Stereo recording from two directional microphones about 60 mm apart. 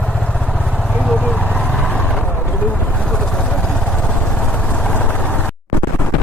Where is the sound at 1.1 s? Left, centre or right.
Left.